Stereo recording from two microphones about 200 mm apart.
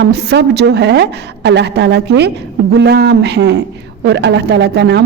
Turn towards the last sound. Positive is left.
turn(degrees=-55)  # may be behind; listen again after turning